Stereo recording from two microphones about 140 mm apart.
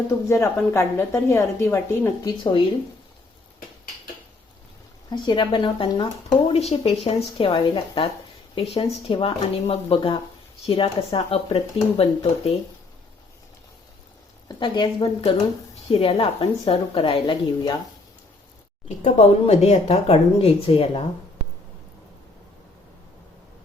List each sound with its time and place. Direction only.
0.3 s a woman's voice: 20° left (ahead or behind)
2.2 s a woman's voice: 35° left (ahead or behind)
5.1 s a woman's voice: 35° left (ahead or behind)
6.5 s a woman's voice: 50° left (ahead or behind)
14.4 s a woman's voice: 30° left (ahead or behind)
19.0 s speech: 50° left (ahead or behind)